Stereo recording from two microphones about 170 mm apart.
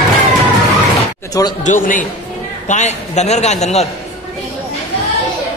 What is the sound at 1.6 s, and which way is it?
A man's voice, 50° left (ahead or behind).